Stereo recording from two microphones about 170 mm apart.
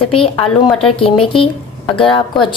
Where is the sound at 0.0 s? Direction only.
30° left (ahead or behind).